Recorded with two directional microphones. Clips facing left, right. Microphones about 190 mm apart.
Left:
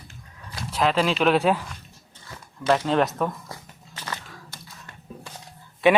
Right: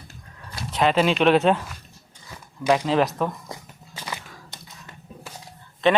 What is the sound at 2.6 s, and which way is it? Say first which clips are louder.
Speech: right 1 dB; 10° right (ahead or behind).